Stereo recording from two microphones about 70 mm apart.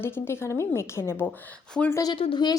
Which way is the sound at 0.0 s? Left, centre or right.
Left.